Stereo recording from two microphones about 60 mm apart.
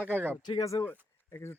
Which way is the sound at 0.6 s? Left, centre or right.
Left.